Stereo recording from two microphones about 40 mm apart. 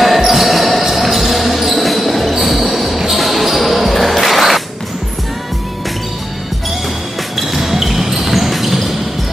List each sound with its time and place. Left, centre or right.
0.0 s basketball bounce: centre
7.3 s basketball bounce: centre